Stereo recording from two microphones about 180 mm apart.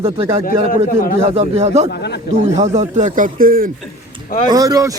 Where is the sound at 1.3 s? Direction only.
35° right (ahead or behind); by 3.7 s 50° right (ahead or behind).